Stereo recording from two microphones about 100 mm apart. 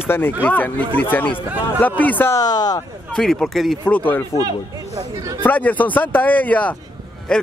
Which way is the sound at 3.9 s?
15° left (ahead or behind).